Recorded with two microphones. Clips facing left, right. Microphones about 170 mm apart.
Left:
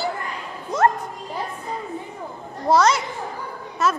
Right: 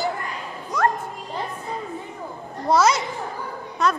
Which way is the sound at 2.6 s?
Centre (ahead or behind).